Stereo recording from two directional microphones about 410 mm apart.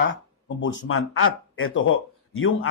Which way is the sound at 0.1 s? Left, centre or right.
Left.